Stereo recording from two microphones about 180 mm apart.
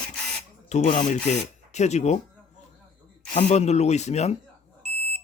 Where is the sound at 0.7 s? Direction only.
40° left (ahead or behind).